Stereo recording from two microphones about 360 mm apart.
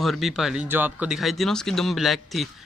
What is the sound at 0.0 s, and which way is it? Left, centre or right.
Speech, centre.